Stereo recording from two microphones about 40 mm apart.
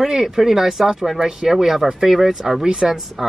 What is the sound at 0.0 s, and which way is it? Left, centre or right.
Speech, centre.